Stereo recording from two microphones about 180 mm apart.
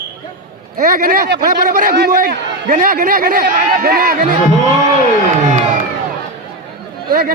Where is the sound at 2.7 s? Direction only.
45° right (ahead or behind).